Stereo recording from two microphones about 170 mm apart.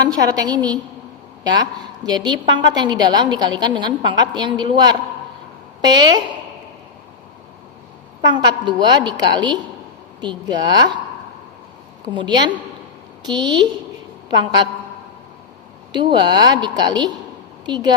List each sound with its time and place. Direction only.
0.1 s a woman's voice: 20° right (ahead or behind)
2.0 s a woman's voice: 25° right (ahead or behind)
8.3 s a woman's voice: 25° right (ahead or behind)
12.1 s a woman's voice: 25° right (ahead or behind)
15.9 s a woman's voice: 25° right (ahead or behind)